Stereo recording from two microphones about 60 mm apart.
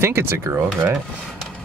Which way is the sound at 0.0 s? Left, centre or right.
Right.